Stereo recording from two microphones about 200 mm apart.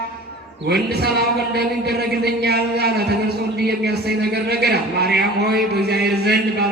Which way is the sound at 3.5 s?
55° right (ahead or behind).